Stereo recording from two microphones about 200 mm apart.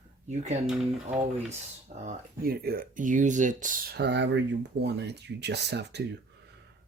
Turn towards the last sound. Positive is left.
turn(degrees=-55)  # may be behind; listen again after turning